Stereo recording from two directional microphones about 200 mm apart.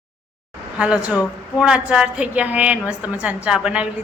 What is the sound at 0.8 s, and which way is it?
A woman's voice, 5° right (ahead or behind).